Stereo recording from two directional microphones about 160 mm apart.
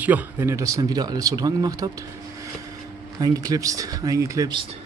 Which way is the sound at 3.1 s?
20° right (ahead or behind).